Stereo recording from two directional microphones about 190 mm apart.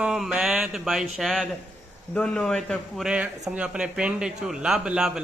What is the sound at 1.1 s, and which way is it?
Speech, centre (ahead or behind).